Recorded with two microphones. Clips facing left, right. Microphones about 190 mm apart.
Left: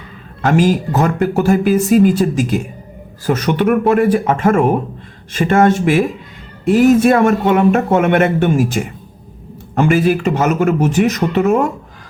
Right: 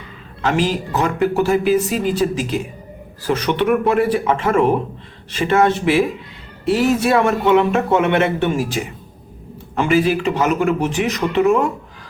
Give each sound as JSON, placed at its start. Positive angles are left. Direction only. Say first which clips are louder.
{"t": 0.4, "sound": "a man's voice", "louder": "left 5 dB", "side_deg": 50}